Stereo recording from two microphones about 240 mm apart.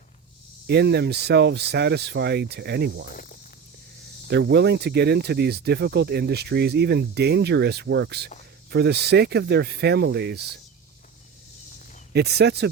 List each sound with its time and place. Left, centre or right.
0.7 s speech: right
4.3 s speech: right
12.1 s speech: right